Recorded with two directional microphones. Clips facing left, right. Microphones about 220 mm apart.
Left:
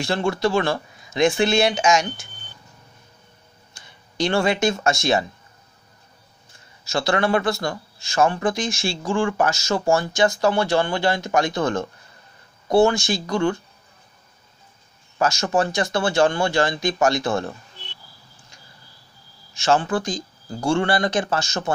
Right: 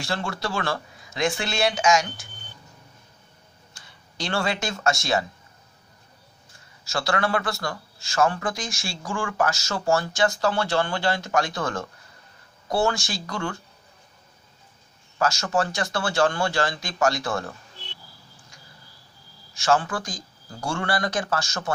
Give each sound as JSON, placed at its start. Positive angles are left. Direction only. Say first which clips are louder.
{"t": 0.0, "sound": "speech", "louder": "left 8 dB", "side_deg": 20}
{"t": 3.7, "sound": "speech", "louder": "left 11 dB", "side_deg": 20}
{"t": 6.8, "sound": "speech", "louder": "left 4 dB", "side_deg": 20}
{"t": 15.1, "sound": "speech", "louder": "left 3 dB", "side_deg": 20}
{"t": 19.6, "sound": "speech", "louder": "left 3 dB", "side_deg": 20}